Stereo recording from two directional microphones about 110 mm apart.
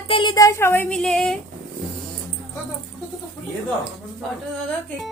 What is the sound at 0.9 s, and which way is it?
Speech, 5° left (ahead or behind).